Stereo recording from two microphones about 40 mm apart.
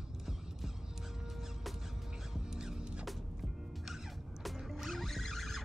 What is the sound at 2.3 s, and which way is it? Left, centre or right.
Music, centre.